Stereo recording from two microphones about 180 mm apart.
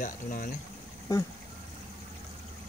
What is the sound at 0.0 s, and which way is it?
Speech, 50° left (ahead or behind).